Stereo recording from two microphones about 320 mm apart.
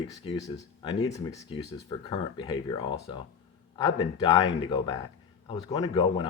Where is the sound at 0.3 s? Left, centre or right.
Centre.